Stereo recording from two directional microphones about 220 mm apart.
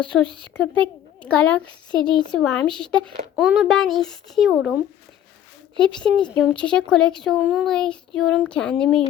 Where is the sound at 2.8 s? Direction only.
5° left (ahead or behind).